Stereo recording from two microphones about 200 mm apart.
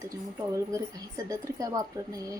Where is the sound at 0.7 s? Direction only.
15° right (ahead or behind).